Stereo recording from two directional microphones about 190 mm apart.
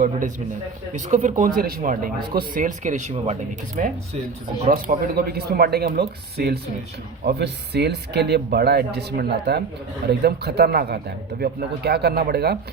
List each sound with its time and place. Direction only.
0.9 s speech: 40° right (ahead or behind)
1.4 s speech: 50° right (ahead or behind)